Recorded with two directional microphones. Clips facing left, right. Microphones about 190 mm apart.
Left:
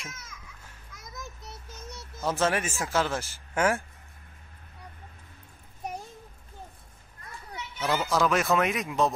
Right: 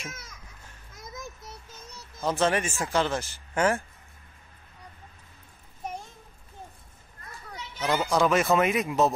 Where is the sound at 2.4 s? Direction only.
5° left (ahead or behind).